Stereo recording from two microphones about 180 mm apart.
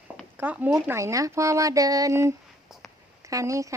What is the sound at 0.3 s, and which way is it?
Speech, 10° right (ahead or behind).